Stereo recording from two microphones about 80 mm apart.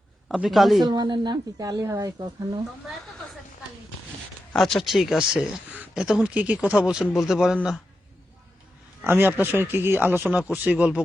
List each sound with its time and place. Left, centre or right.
0.4 s speech: centre
0.9 s a woman's voice: right
1.6 s speech: right
4.5 s speech: centre
9.0 s speech: right